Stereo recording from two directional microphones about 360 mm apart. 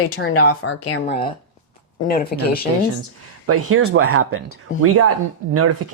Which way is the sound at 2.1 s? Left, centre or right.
Left.